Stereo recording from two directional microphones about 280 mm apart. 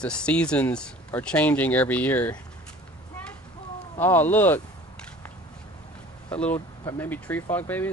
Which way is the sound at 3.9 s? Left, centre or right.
Centre.